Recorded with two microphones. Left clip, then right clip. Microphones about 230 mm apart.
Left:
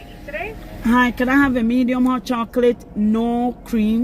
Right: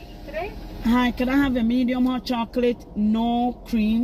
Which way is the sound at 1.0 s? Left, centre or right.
Left.